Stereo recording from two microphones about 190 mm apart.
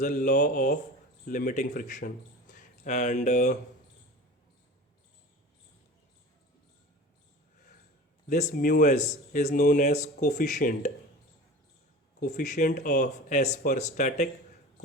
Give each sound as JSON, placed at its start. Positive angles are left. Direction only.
{"t": 0.0, "sound": "speech", "side_deg": 40}
{"t": 8.3, "sound": "speech", "side_deg": 40}
{"t": 12.2, "sound": "speech", "side_deg": 40}